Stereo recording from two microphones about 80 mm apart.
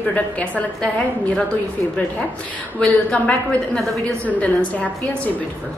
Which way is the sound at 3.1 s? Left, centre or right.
Centre.